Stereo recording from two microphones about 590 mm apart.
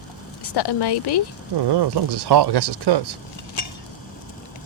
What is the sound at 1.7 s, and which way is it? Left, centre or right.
Speech, right.